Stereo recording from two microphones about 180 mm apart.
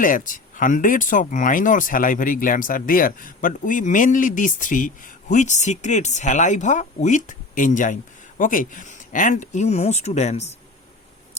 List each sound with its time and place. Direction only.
0.0 s speech: 50° left (ahead or behind)